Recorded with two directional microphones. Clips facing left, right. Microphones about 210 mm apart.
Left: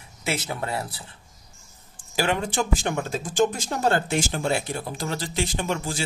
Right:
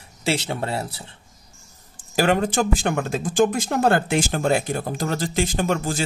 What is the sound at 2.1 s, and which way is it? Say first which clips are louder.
Speech: right 5 dB; 45° right (ahead or behind).